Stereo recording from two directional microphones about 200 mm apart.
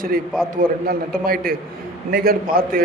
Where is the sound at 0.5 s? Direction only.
45° right (ahead or behind).